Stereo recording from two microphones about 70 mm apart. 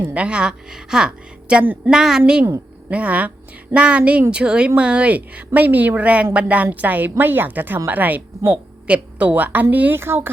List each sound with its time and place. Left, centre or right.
0.1 s a woman's voice: centre; by 10.2 s right